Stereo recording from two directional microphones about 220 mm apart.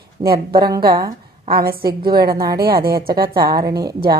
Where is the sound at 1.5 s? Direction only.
45° right (ahead or behind).